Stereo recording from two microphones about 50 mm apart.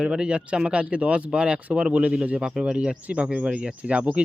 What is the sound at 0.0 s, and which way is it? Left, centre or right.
Speech, centre.